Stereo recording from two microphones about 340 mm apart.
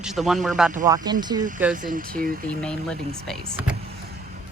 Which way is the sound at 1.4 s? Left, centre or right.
Right.